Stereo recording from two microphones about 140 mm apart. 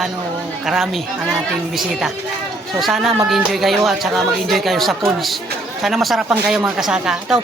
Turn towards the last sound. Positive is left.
turn(degrees=-5)  # may be behind; listen again after turning